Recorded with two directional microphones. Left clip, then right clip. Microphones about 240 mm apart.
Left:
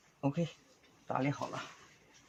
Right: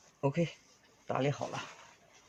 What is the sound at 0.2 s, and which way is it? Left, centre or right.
A man's voice, right.